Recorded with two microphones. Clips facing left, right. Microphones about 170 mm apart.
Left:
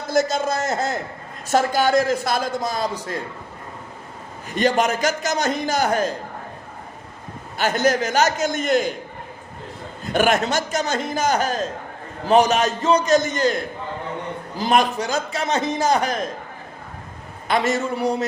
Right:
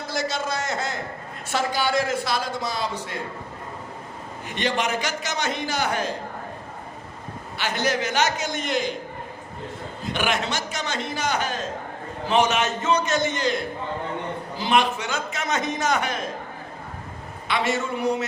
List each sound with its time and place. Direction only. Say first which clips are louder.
0.1 s a man's voice: left 7 dB; 45° left (ahead or behind)
4.4 s a man's voice: left 6 dB; 45° left (ahead or behind)
7.5 s a man's voice: left 6 dB; 45° left (ahead or behind)
10.1 s a man's voice: left 7 dB; 45° left (ahead or behind)
14.6 s a man's voice: left 3 dB; 40° left (ahead or behind)
17.5 s a man's voice: left 4 dB; 40° left (ahead or behind)